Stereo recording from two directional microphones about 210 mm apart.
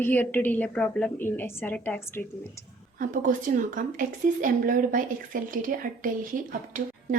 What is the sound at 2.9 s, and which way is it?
A woman's voice, 40° right (ahead or behind).